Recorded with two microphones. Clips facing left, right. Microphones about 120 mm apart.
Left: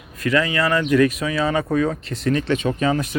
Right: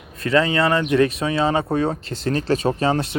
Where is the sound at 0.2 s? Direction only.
30° right (ahead or behind).